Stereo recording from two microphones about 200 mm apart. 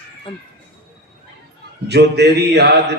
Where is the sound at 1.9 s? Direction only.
55° right (ahead or behind).